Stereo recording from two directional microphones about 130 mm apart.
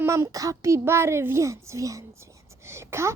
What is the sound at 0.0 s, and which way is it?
A child's voice, 20° right (ahead or behind).